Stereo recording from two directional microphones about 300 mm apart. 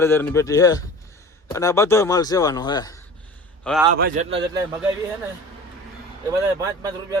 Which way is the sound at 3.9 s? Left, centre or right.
Right.